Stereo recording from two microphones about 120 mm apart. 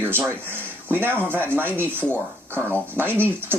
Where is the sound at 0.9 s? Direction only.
15° right (ahead or behind).